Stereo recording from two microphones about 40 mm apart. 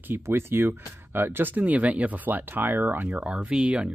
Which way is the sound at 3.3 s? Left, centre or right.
Right.